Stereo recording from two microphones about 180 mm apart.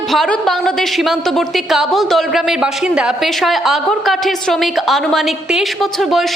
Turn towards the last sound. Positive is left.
turn(degrees=0)  # may be behind; listen again after turning